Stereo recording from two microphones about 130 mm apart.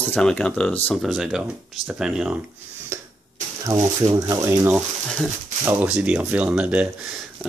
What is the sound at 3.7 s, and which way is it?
Speech, 25° right (ahead or behind).